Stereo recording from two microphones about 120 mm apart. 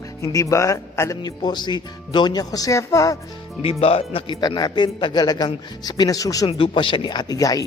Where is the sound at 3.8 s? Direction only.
55° left (ahead or behind); by 6.4 s 30° left (ahead or behind).